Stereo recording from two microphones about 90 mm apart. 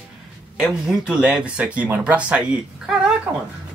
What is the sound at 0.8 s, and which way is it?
Speech, 10° right (ahead or behind).